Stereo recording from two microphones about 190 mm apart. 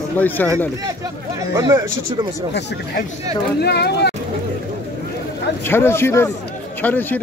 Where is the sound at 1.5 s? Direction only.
15° right (ahead or behind).